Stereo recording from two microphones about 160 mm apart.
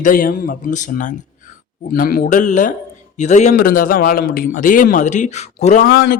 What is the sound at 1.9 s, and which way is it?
A man's voice, 65° left (ahead or behind).